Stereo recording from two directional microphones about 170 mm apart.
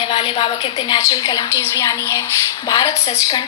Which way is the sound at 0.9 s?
20° left (ahead or behind).